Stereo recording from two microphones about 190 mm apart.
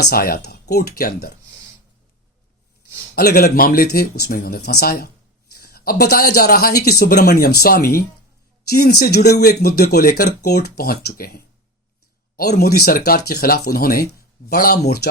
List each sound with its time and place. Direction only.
0.0 s speech: 55° left (ahead or behind)
3.2 s speech: 55° left (ahead or behind)